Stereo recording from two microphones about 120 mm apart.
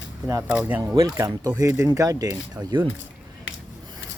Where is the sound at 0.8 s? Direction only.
25° right (ahead or behind).